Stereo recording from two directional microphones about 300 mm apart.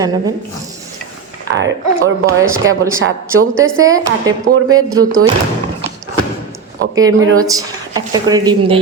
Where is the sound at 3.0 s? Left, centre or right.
Right.